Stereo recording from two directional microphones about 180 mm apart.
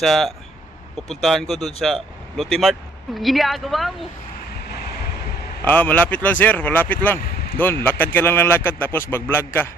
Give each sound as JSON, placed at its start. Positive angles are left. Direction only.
{"t": 0.0, "sound": "speech", "side_deg": 0}
{"t": 4.6, "sound": "vehicle", "side_deg": 65}
{"t": 5.6, "sound": "speech", "side_deg": 10}